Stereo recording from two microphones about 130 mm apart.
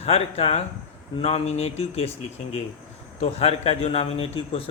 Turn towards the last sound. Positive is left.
turn(degrees=45)  # may be behind; listen again after turning